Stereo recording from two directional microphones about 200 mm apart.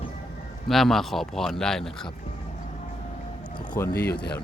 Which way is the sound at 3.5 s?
20° left (ahead or behind).